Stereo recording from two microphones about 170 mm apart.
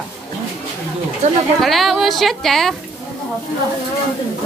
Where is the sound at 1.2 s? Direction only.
45° right (ahead or behind).